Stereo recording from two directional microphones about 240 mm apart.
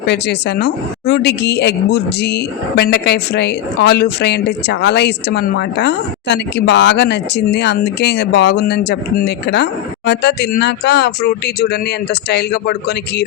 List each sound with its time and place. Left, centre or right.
0.1 s a woman's voice: left